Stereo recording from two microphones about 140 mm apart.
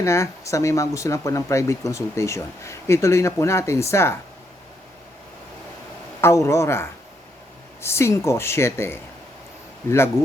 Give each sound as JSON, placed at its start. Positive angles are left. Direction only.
{"t": 0.0, "sound": "speech", "side_deg": 20}
{"t": 6.2, "sound": "speech", "side_deg": 20}